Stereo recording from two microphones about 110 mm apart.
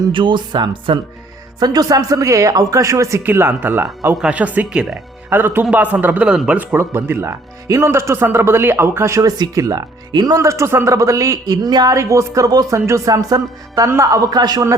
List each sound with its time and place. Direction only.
0.1 s speech: 50° right (ahead or behind); by 4.9 s 10° right (ahead or behind)
5.3 s speech: 20° right (ahead or behind); by 14.6 s 40° right (ahead or behind)